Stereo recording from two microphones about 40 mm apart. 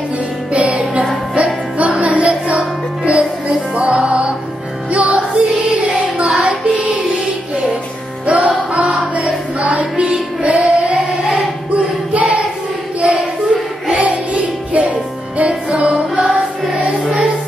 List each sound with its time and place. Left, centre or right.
0.5 s music: right
8.3 s music: right
11.7 s choir: right
13.8 s music: right